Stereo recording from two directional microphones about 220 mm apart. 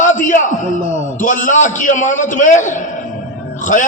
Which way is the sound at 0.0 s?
35° left (ahead or behind).